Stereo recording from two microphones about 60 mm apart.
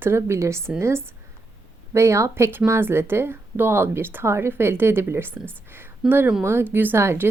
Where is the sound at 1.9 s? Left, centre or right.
Right.